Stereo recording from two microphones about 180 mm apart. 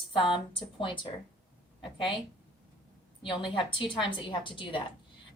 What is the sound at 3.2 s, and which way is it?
A woman's voice, 25° left (ahead or behind).